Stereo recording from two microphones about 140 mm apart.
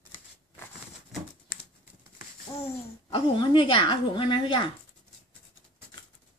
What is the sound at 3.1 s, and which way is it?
Speech, 35° left (ahead or behind).